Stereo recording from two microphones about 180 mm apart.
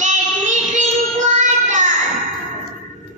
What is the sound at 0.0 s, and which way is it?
Child singing, 40° right (ahead or behind).